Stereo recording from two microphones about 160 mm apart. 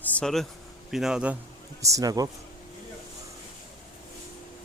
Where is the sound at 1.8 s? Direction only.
20° right (ahead or behind).